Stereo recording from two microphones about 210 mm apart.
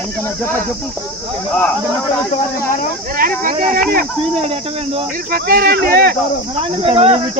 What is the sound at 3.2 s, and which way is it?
Speech, 40° right (ahead or behind).